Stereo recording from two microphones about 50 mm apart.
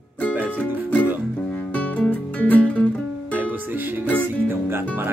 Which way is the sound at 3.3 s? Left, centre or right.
Right.